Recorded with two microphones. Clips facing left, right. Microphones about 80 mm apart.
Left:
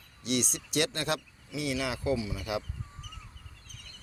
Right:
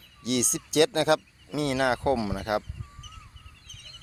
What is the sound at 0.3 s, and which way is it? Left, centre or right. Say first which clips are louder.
Speech: right 3 dB; right.